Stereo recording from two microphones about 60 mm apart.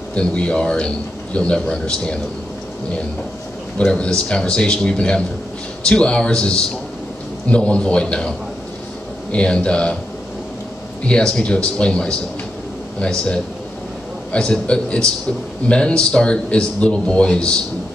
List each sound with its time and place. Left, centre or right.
0.1 s a man's voice: centre
3.7 s a man's voice: centre
11.1 s a man's voice: centre